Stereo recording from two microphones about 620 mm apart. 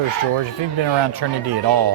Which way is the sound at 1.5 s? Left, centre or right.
Right.